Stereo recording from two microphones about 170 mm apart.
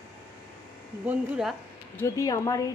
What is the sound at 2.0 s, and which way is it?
Speech, 20° left (ahead or behind).